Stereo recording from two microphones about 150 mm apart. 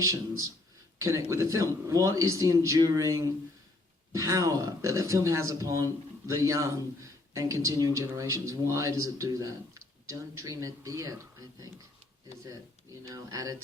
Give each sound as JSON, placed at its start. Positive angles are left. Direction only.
{"t": 0.0, "sound": "speech", "side_deg": -20}
{"t": 12.5, "sound": "speech", "side_deg": -20}